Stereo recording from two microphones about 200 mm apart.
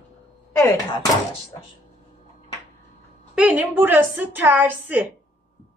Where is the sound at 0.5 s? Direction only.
15° left (ahead or behind).